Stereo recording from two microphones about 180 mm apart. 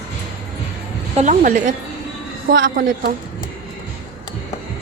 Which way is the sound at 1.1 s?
40° right (ahead or behind).